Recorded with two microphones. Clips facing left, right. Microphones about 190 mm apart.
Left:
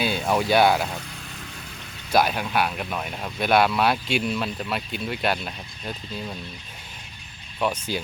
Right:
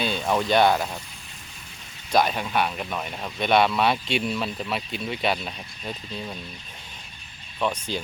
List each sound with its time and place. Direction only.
0.0 s speech: 5° left (ahead or behind)
2.1 s speech: 5° left (ahead or behind)
7.9 s speech: 5° left (ahead or behind)